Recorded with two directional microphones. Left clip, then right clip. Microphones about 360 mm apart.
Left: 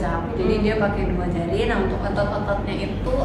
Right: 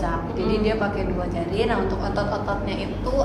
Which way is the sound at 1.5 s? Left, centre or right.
Centre.